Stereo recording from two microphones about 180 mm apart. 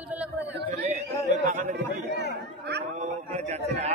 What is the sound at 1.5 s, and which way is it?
Chatter, 45° right (ahead or behind).